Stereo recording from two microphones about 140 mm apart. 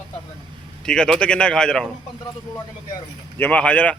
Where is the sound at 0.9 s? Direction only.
5° left (ahead or behind).